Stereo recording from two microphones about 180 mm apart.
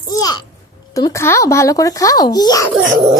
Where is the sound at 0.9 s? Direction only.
15° left (ahead or behind).